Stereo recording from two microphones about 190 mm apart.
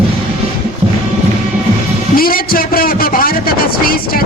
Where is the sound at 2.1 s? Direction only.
50° left (ahead or behind).